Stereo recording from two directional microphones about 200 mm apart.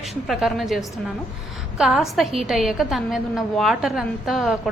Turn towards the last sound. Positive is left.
turn(degrees=0)  # may be behind; listen again after turning